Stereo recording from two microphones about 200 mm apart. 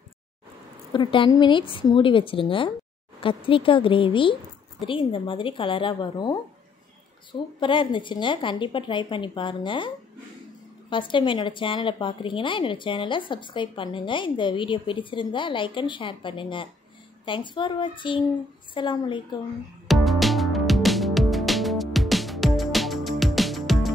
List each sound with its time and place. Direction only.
0.9 s a woman's voice: 25° left (ahead or behind)
7.6 s a woman's voice: 25° left (ahead or behind)
19.9 s music: centre (ahead or behind)